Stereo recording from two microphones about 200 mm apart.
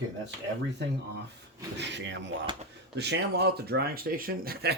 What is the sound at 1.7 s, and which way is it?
Speech, 60° right (ahead or behind).